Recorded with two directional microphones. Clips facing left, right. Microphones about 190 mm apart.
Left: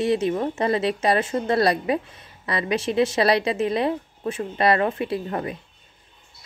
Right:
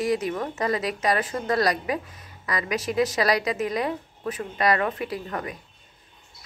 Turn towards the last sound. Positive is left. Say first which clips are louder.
# left 4 dB
turn(degrees=30)  # may be behind; listen again after turning